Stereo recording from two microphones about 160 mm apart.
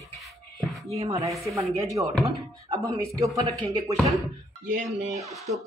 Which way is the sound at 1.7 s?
20° right (ahead or behind).